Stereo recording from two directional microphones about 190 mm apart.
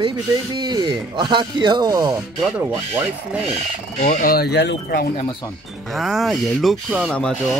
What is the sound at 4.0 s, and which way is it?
Speech, 45° left (ahead or behind).